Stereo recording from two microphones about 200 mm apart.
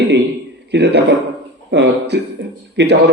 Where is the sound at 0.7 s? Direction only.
55° right (ahead or behind).